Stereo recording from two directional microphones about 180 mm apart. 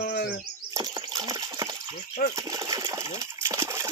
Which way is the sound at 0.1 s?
65° left (ahead or behind).